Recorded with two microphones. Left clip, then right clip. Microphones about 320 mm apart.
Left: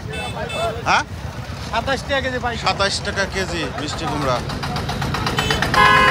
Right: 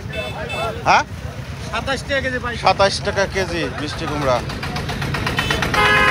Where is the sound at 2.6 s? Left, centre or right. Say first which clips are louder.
Right 6 dB; centre.